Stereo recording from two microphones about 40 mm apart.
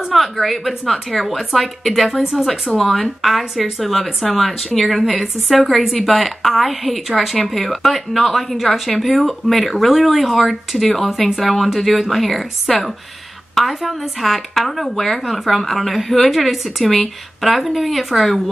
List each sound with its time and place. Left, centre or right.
0.1 s speech: centre